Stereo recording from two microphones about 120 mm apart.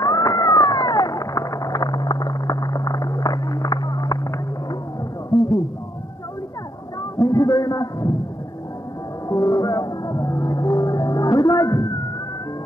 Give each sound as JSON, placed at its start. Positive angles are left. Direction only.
{"t": 0.0, "sound": "cat", "side_deg": 30}
{"t": 7.2, "sound": "a sound", "side_deg": 30}
{"t": 9.3, "sound": "music", "side_deg": 30}